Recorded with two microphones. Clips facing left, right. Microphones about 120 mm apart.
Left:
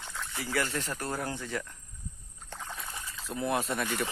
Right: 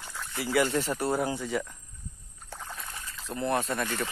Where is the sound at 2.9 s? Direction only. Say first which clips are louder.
Even; 20° left (ahead or behind).